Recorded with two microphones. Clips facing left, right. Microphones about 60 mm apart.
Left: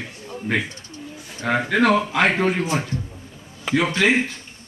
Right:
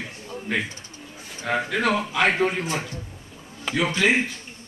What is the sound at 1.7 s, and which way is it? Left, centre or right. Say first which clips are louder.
Speech: left 8 dB; left.